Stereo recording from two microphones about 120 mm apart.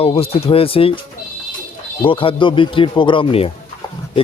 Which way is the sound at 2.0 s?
45° left (ahead or behind).